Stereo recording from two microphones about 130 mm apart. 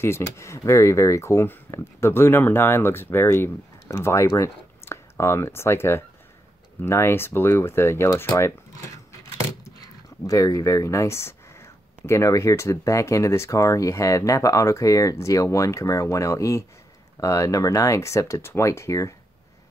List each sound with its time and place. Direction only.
0.0 s speech: 20° left (ahead or behind)
9.8 s speech: 25° left (ahead or behind)